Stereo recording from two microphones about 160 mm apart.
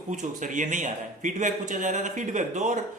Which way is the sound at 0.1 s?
50° right (ahead or behind).